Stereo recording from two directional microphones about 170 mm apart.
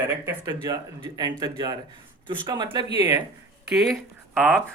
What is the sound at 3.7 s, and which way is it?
Speech, centre (ahead or behind).